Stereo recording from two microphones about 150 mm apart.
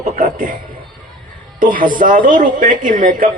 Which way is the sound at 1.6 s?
65° right (ahead or behind).